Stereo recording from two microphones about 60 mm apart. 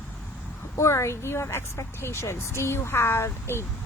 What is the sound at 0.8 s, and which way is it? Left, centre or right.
Speech, left.